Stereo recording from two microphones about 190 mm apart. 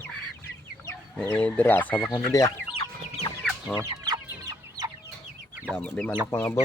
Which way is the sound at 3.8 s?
20° right (ahead or behind).